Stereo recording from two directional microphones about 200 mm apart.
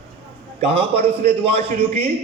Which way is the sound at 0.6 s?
30° right (ahead or behind).